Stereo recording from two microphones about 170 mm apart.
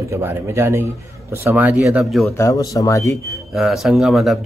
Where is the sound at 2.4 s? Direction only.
20° left (ahead or behind).